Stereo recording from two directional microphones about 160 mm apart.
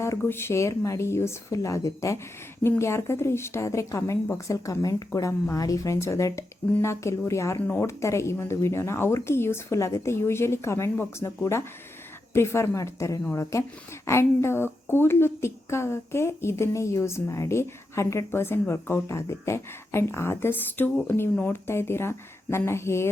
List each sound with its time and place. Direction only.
0.0 s a woman's voice: 15° left (ahead or behind)